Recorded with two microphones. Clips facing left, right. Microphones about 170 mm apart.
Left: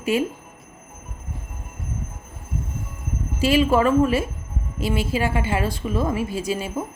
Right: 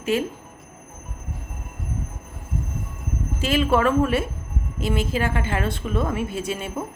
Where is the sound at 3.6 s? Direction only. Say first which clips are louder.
Left 1 dB; 5° left (ahead or behind).